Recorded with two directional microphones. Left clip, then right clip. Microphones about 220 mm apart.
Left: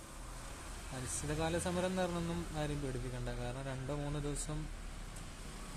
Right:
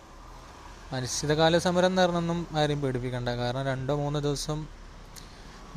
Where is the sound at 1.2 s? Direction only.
35° right (ahead or behind).